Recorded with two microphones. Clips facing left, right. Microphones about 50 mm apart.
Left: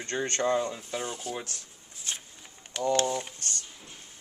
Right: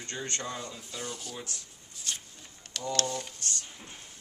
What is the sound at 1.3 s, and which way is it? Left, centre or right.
Speech, left.